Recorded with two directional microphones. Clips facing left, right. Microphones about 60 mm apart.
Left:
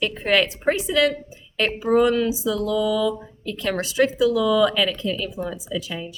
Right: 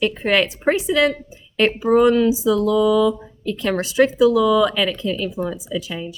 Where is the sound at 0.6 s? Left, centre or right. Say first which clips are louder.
Right 3 dB; right.